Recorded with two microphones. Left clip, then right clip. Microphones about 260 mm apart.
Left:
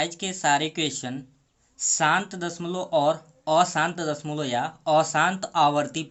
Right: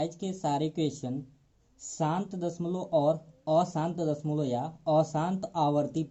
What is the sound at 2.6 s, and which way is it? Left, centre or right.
Speech, left.